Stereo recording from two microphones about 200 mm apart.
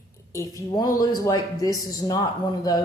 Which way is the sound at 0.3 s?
15° left (ahead or behind).